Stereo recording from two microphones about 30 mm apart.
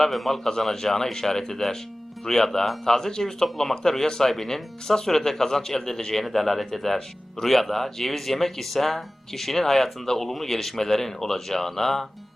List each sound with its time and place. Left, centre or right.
0.1 s a man's voice: centre
0.4 s speech: centre